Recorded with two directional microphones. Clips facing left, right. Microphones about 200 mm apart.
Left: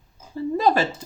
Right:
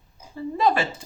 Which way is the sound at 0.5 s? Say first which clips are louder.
Left 2 dB; 40° left (ahead or behind).